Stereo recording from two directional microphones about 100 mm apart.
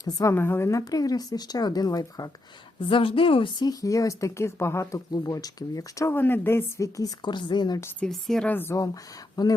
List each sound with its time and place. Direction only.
0.0 s speech: 35° left (ahead or behind)
0.3 s speech: 20° left (ahead or behind); by 2.3 s 40° left (ahead or behind)
2.9 s a woman's voice: 65° left (ahead or behind)
3.6 s speech: 35° left (ahead or behind)
5.1 s speech: 40° left (ahead or behind)
6.1 s a woman's voice: 20° left (ahead or behind)
7.3 s a woman's voice: 50° left (ahead or behind)
8.0 s a woman's voice: 5° left (ahead or behind)
8.4 s a woman's voice: 20° left (ahead or behind)
9.3 s speech: 40° left (ahead or behind)